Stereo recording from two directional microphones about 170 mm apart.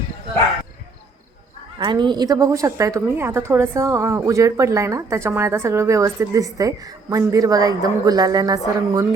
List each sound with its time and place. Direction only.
1.8 s a woman's voice: 25° right (ahead or behind)